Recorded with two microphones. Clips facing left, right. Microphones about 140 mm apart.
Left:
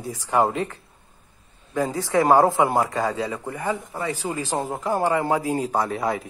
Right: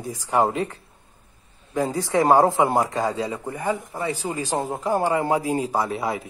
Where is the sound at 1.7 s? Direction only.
15° right (ahead or behind).